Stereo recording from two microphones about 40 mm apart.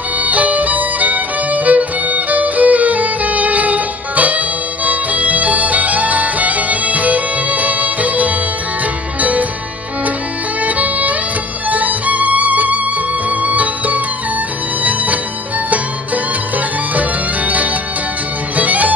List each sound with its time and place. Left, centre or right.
0.2 s violin: right
4.8 s music: right
10.6 s music: right
18.6 s music: right